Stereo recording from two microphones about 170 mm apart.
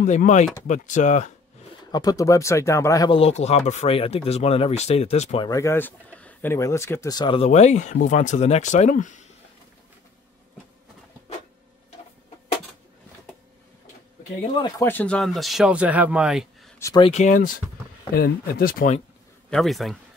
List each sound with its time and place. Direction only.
0.0 s speech: 45° left (ahead or behind)
1.9 s speech: 20° left (ahead or behind)
3.1 s speech: 35° left (ahead or behind)
5.4 s speech: 20° left (ahead or behind)
7.4 s speech: 40° left (ahead or behind)
14.5 s speech: 25° left (ahead or behind)
14.9 s speech: 10° left (ahead or behind)
16.8 s speech: 25° left (ahead or behind)
17.1 s speech: 45° left (ahead or behind)
18.1 s speech: 60° left (ahead or behind)
19.5 s speech: centre (ahead or behind)